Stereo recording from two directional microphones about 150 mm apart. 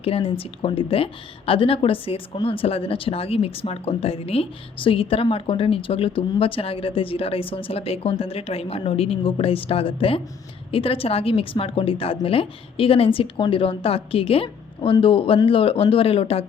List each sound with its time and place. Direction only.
0.0 s speech: 40° left (ahead or behind)